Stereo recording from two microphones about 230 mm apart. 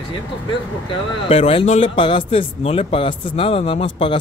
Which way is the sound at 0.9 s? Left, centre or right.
Left.